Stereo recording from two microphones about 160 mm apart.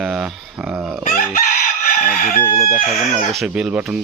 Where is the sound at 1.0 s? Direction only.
55° left (ahead or behind).